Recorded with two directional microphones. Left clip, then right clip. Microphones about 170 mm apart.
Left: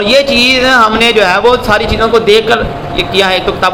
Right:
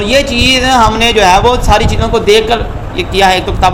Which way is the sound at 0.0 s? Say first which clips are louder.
Left 2 dB; 30° right (ahead or behind).